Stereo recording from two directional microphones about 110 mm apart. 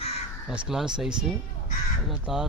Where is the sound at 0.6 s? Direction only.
5° right (ahead or behind).